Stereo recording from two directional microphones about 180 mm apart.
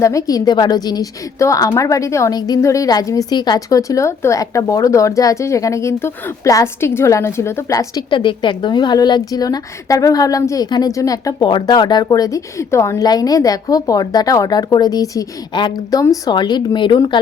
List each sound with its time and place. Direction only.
0.0 s a woman's voice: 20° left (ahead or behind)